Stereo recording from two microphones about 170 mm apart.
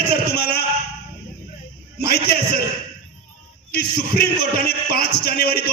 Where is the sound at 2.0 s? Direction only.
65° left (ahead or behind).